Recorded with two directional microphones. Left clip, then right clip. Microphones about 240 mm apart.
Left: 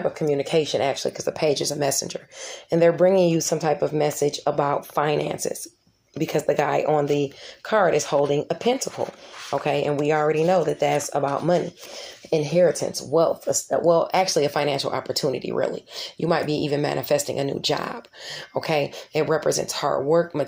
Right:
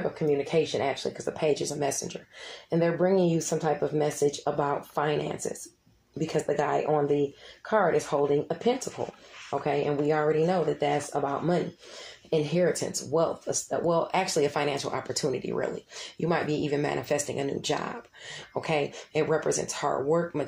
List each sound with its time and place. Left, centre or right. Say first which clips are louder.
0.2 s speech: left 2 dB; left
6.5 s speech: left 6 dB; left
8.5 s speech: left 5 dB; left